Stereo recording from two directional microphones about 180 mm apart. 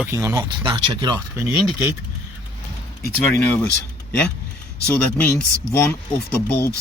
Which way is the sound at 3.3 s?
10° left (ahead or behind).